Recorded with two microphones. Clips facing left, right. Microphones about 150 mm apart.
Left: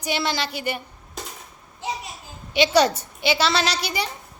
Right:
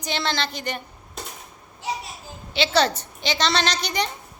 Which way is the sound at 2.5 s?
10° left (ahead or behind).